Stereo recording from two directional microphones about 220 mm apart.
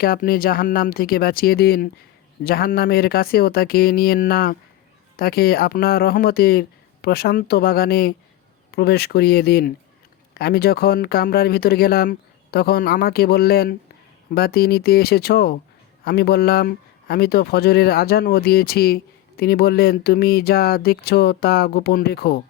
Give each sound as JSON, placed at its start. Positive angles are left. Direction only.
{"t": 0.0, "sound": "speech", "side_deg": 40}